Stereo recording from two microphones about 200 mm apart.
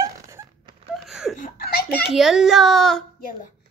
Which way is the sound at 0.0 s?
15° right (ahead or behind).